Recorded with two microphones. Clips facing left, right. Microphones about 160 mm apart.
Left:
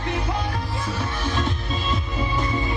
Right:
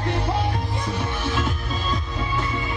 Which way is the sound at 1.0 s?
5° right (ahead or behind).